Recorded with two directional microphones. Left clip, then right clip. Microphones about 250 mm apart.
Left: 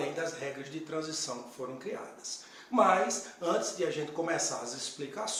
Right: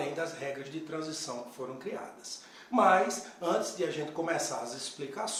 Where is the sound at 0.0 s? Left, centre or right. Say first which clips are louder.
Even; centre.